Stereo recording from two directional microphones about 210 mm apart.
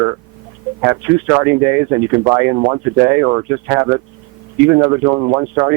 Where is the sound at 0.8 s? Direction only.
15° right (ahead or behind).